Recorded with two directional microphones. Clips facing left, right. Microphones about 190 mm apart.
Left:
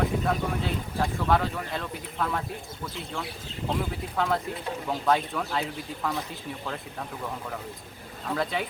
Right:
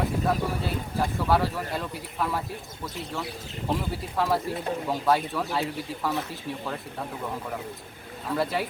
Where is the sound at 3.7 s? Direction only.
5° right (ahead or behind).